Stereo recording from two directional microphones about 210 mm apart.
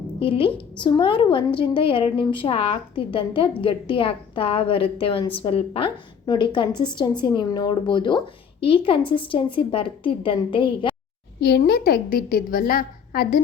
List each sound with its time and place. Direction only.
0.2 s a woman's voice: 25° left (ahead or behind)
11.3 s a woman's voice: 50° left (ahead or behind)